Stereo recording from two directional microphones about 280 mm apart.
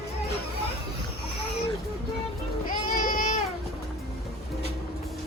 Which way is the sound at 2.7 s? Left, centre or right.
Left.